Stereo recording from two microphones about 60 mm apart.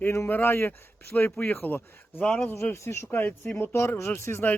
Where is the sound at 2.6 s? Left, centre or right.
Left.